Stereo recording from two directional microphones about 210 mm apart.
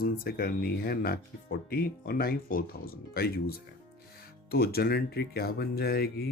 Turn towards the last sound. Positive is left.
turn(degrees=50)  # may be behind; listen again after turning